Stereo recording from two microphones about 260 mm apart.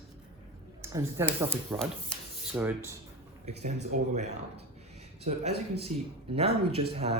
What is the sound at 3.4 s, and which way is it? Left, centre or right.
Speech, right.